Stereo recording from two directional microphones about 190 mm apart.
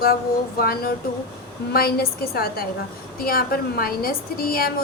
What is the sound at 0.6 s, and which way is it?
A woman's voice, 55° left (ahead or behind).